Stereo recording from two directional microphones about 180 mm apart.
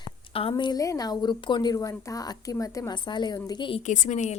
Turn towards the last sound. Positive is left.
turn(degrees=40)  # may be behind; listen again after turning